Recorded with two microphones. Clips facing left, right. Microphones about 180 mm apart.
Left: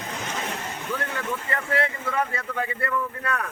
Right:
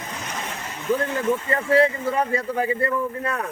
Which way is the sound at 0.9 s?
30° right (ahead or behind).